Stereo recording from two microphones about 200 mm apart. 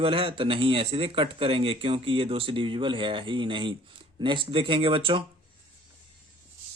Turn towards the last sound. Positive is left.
turn(degrees=-25)  # may be behind; listen again after turning